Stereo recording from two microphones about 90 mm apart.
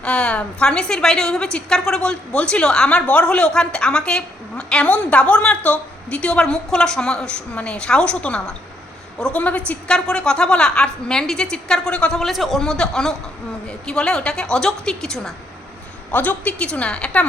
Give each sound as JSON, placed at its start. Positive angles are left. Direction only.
{"t": 0.0, "sound": "a woman's voice", "side_deg": 10}
{"t": 12.2, "sound": "a man's voice", "side_deg": 0}
{"t": 16.1, "sound": "a woman's voice", "side_deg": 20}